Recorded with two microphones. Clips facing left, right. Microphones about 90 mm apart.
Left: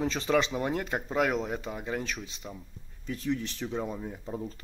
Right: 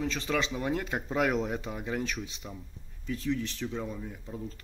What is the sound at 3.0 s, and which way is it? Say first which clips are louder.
Speech: even; 15° left (ahead or behind).